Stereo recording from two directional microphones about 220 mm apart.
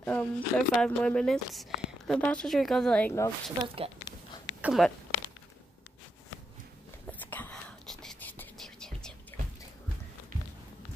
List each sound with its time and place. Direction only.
0.0 s speech: 10° left (ahead or behind)
3.6 s speech: 25° right (ahead or behind)
4.6 s speech: 5° right (ahead or behind)
7.1 s whispering: 10° left (ahead or behind)